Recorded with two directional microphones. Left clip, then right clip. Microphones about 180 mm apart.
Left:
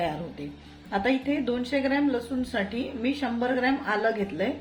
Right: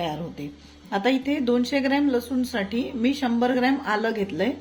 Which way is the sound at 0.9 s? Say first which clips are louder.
Right 3 dB; 30° right (ahead or behind).